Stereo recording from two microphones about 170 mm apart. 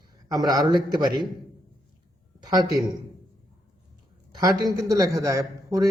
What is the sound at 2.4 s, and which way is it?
Speech, 25° right (ahead or behind).